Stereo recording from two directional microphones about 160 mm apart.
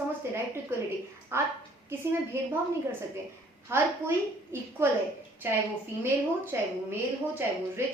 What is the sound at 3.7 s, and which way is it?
A woman's voice, 15° right (ahead or behind).